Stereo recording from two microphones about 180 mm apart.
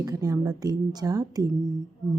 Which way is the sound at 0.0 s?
20° right (ahead or behind).